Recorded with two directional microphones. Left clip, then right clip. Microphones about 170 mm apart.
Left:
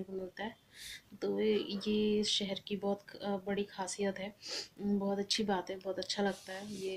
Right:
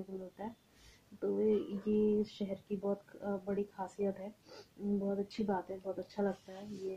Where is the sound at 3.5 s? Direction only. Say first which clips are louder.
Left 1 dB; 5° left (ahead or behind).